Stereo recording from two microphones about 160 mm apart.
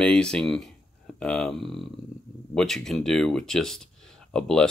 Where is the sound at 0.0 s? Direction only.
5° left (ahead or behind).